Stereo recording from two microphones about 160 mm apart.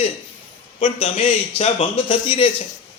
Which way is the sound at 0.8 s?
35° left (ahead or behind).